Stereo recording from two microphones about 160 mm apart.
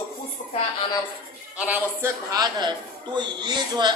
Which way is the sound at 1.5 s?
10° right (ahead or behind).